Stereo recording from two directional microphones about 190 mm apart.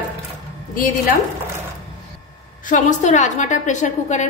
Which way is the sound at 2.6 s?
40° left (ahead or behind).